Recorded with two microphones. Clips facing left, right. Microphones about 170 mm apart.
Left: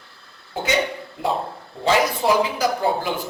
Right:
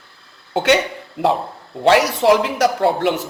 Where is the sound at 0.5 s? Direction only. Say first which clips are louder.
Right 8 dB; 80° right.